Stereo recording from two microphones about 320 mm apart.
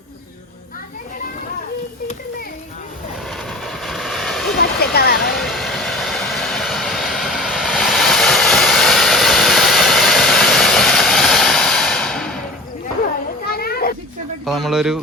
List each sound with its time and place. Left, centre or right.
3.2 s vehicle: centre
4.5 s a sound: left
5.4 s vehicle: centre
13.5 s children playing: left
14.4 s speech: centre